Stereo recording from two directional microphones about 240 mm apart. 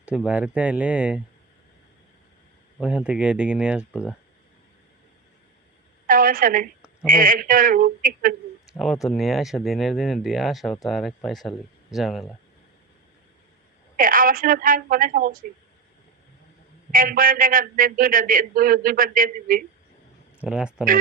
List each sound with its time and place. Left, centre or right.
0.0 s speech: centre
2.8 s speech: centre
6.1 s a woman's voice: right
9.0 s speech: centre
13.9 s a man's voice: right
16.9 s a man's voice: right
20.4 s speech: centre